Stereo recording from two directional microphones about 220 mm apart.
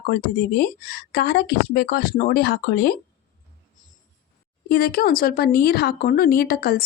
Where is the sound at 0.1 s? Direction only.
45° left (ahead or behind).